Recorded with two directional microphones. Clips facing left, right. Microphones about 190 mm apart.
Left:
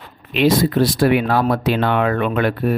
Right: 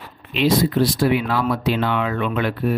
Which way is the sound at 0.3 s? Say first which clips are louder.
Left 2 dB; 50° left (ahead or behind).